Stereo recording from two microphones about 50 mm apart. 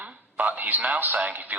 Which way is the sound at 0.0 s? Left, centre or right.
Right.